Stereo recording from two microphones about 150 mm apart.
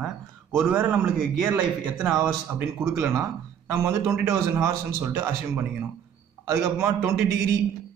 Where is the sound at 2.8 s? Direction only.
15° right (ahead or behind).